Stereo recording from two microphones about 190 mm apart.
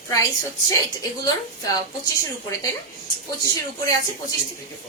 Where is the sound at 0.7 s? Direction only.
20° left (ahead or behind).